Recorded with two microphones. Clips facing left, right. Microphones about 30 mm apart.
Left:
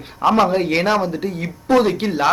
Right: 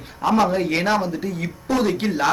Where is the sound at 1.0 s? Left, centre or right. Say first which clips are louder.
Left 3 dB; left.